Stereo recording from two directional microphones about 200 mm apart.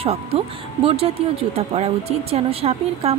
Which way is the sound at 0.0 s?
30° right (ahead or behind).